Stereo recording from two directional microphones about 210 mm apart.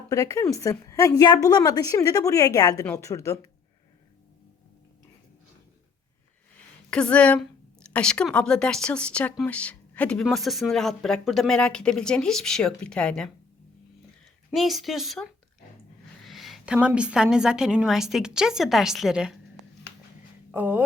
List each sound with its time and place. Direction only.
0.1 s a woman's voice: 15° left (ahead or behind)
6.9 s speech: 5° left (ahead or behind)
14.5 s speech: centre (ahead or behind)
20.5 s speech: 10° right (ahead or behind)